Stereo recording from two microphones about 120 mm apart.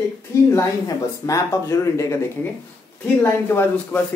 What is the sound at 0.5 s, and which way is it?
Speech, 25° left (ahead or behind).